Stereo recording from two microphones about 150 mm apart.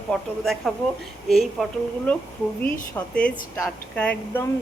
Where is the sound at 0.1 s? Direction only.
Centre (ahead or behind).